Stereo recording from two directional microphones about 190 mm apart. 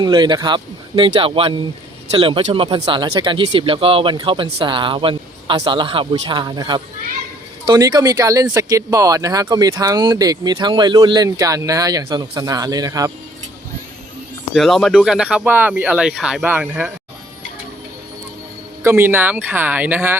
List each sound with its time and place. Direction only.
0.0 s speech: 20° right (ahead or behind)
14.5 s speech: centre (ahead or behind)
18.8 s speech: 10° right (ahead or behind)